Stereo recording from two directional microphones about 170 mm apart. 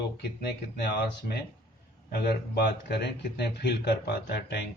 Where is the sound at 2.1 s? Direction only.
70° left (ahead or behind).